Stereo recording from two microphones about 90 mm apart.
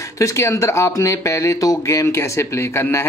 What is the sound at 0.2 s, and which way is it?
Speech, 35° left (ahead or behind).